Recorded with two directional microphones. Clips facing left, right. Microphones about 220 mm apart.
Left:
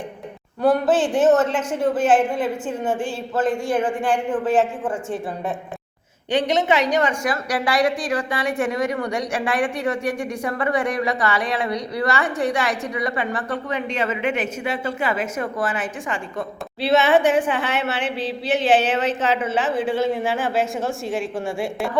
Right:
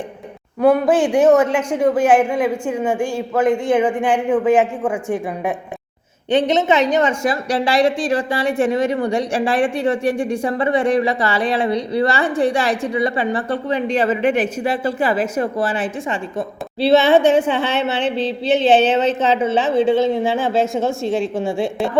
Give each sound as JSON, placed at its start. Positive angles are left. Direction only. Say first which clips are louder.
{"t": 0.6, "sound": "a woman's voice", "louder": "right 4 dB", "side_deg": -10}